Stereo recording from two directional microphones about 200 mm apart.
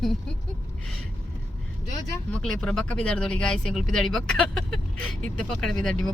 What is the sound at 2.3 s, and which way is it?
Speech, 5° left (ahead or behind).